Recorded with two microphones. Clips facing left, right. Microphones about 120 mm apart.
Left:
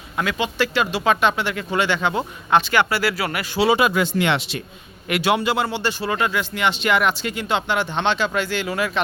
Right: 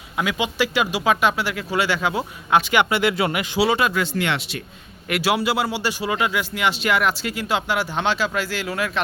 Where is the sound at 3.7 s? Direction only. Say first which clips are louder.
Left 3 dB; 10° left (ahead or behind).